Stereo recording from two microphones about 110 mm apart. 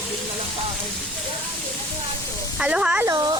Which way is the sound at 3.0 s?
30° right (ahead or behind).